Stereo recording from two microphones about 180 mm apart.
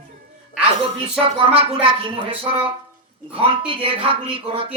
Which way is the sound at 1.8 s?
30° right (ahead or behind).